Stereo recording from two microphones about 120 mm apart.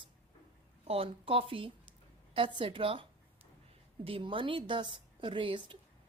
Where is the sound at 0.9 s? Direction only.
50° right (ahead or behind).